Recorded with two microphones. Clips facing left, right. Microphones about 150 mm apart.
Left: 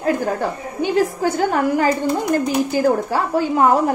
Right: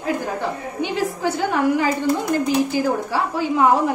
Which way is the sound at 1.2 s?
45° left (ahead or behind).